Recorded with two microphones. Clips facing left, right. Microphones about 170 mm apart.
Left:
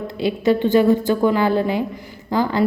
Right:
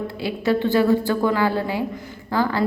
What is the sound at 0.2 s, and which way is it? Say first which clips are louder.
A woman's voice: left 4 dB; 20° left (ahead or behind).